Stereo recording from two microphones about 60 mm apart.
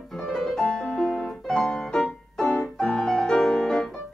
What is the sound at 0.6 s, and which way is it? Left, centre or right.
Music, left.